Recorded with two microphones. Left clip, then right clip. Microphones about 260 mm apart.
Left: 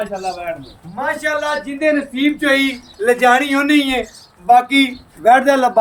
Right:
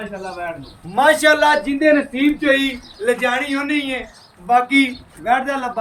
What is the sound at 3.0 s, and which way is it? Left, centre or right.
Speech, centre.